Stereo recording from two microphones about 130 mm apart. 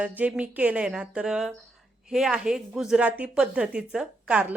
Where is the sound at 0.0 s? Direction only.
10° right (ahead or behind).